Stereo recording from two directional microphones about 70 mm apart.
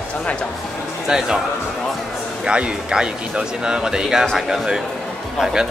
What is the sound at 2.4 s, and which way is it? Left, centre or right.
Speech, centre.